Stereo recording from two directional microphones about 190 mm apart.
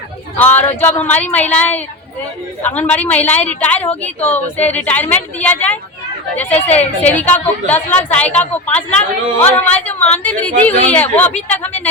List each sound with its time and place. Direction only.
0.3 s a woman's voice: 10° left (ahead or behind)